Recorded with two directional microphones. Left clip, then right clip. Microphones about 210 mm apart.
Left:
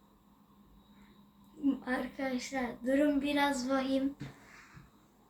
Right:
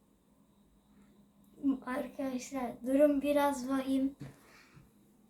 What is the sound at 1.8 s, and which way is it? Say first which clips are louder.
A woman's voice: left 2 dB; 35° right (ahead or behind).